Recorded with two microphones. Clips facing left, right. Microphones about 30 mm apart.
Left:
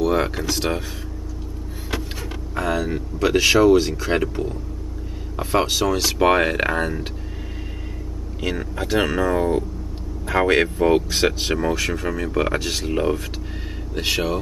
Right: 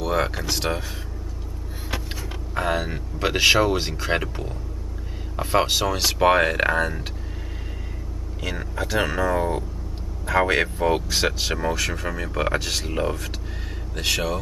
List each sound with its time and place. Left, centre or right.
0.0 s speech: centre
2.6 s speech: right
4.2 s speech: centre
6.1 s speech: centre
8.4 s speech: centre